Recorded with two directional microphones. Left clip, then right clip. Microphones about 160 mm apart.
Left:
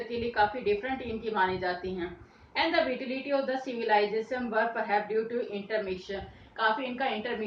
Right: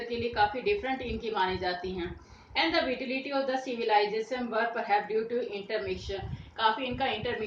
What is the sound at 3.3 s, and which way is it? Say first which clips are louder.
A woman's voice: left 2 dB; 30° right (ahead or behind).